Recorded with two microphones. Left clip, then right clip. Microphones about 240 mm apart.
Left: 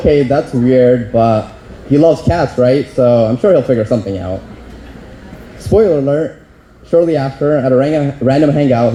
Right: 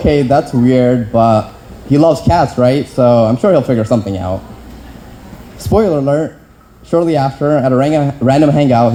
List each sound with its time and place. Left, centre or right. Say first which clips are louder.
0.0 s speech: even; right
5.7 s speech: left 1 dB; right